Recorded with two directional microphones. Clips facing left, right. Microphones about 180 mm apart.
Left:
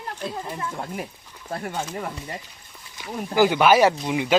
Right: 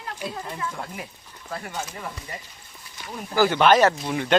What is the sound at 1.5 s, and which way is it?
Speech, 45° left (ahead or behind).